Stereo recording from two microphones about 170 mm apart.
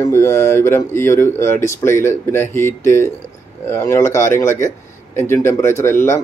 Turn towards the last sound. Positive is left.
turn(degrees=15)  # may be behind; listen again after turning